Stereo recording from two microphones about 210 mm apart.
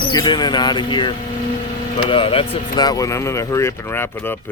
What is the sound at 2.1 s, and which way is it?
Speech, 25° left (ahead or behind).